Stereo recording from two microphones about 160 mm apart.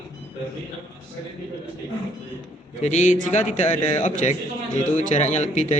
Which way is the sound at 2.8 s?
45° left (ahead or behind).